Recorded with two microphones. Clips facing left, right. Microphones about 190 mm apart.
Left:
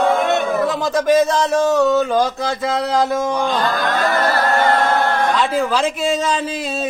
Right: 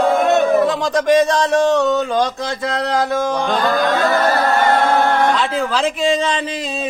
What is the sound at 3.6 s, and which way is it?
Music, 50° right (ahead or behind).